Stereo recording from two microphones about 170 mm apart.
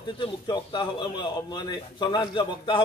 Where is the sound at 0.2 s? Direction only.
25° left (ahead or behind).